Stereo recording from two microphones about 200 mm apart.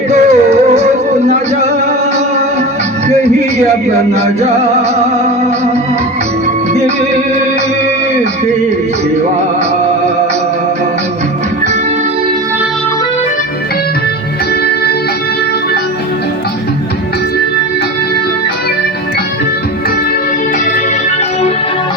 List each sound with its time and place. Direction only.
0.1 s music: 35° right (ahead or behind)
4.1 s music: 35° right (ahead or behind)